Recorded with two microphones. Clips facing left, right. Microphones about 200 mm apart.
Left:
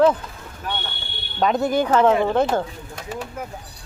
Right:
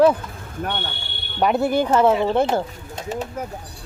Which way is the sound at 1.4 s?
10° right (ahead or behind).